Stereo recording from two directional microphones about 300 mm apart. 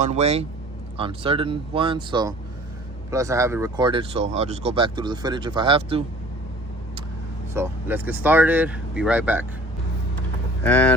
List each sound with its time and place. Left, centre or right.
0.0 s speech: right
7.5 s speech: centre
10.6 s speech: centre